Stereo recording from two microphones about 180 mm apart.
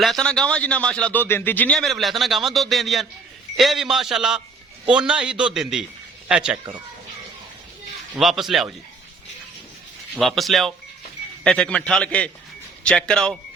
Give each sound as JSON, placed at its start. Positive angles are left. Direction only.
{"t": 0.0, "sound": "a man's voice", "side_deg": 5}
{"t": 8.1, "sound": "a man's voice", "side_deg": 0}
{"t": 10.2, "sound": "a man's voice", "side_deg": 0}